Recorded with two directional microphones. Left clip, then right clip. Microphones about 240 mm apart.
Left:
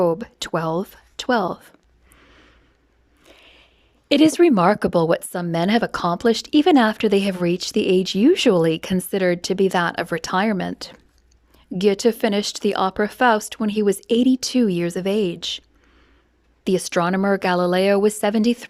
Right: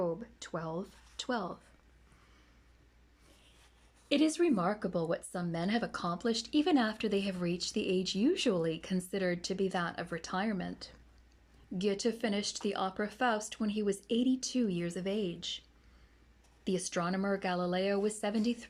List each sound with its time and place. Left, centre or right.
0.0 s speech: left
3.3 s a sound: left
4.1 s speech: left
16.6 s speech: left